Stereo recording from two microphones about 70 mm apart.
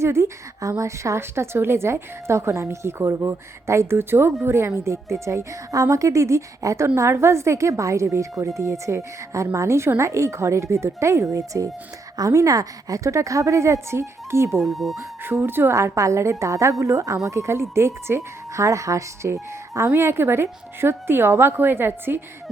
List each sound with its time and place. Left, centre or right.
0.0 s a woman's voice: right
14.6 s speech: centre
15.2 s a woman's voice: right